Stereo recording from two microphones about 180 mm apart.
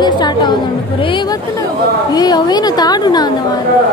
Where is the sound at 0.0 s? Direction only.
25° left (ahead or behind).